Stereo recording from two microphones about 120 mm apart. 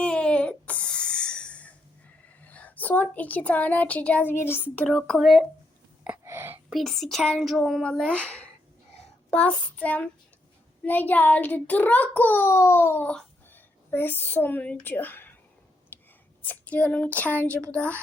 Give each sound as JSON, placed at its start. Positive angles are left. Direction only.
{"t": 0.0, "sound": "a sound", "side_deg": 10}
{"t": 2.5, "sound": "a child's voice", "side_deg": 15}
{"t": 6.2, "sound": "whispering", "side_deg": -20}
{"t": 6.7, "sound": "a child's voice", "side_deg": 0}
{"t": 15.9, "sound": "whispering", "side_deg": 15}
{"t": 16.4, "sound": "a child's voice", "side_deg": 15}